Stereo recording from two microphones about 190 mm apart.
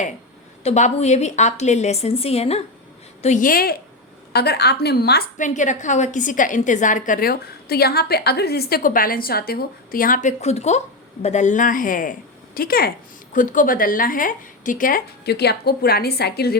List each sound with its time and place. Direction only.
0.6 s a woman's voice: 35° left (ahead or behind); by 5.2 s 60° left (ahead or behind)
5.4 s a woman's voice: 40° left (ahead or behind); by 16.6 s 55° left (ahead or behind)